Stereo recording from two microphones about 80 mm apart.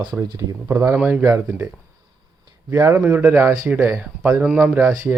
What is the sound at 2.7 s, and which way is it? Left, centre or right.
Speech, right.